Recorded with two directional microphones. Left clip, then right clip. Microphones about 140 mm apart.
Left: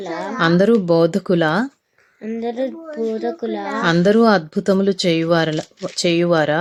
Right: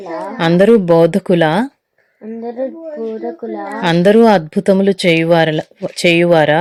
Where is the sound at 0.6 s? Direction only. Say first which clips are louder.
Right 7 dB; 25° right (ahead or behind).